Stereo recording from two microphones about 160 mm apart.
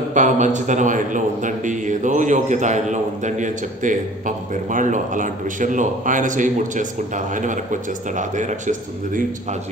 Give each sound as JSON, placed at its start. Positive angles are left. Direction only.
{"t": 0.1, "sound": "a man's voice", "side_deg": -50}